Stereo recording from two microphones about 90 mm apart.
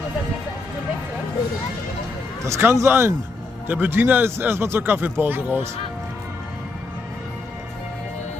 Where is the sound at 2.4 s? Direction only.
30° right (ahead or behind).